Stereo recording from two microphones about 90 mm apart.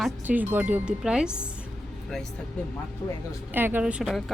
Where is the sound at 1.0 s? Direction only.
10° right (ahead or behind).